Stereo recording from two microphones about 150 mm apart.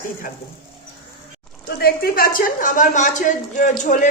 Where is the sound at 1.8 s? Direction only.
85° left; by 4.0 s 55° left (ahead or behind).